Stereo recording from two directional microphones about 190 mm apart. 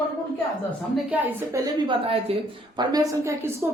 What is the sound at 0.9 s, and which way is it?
A woman's voice, 10° right (ahead or behind).